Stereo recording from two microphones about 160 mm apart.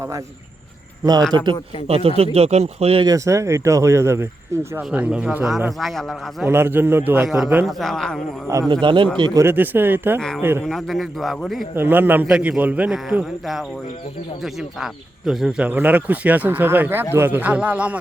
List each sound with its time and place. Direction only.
1.5 s speech: 40° right (ahead or behind)
3.1 s speech: 20° right (ahead or behind)
4.9 s a man's voice: 5° right (ahead or behind)
7.6 s a man's voice: centre (ahead or behind)
8.4 s speech: 20° right (ahead or behind)
9.4 s a man's voice: 15° right (ahead or behind)
10.2 s a man's voice: 5° left (ahead or behind)
11.7 s a man's voice: 15° right (ahead or behind)
15.3 s a man's voice: centre (ahead or behind)